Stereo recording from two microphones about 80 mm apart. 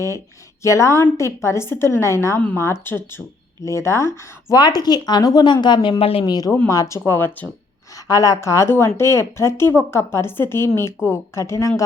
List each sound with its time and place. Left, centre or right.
0.6 s a woman's voice: left
4.5 s a woman's voice: left
6.7 s a woman's voice: left
8.0 s a woman's voice: left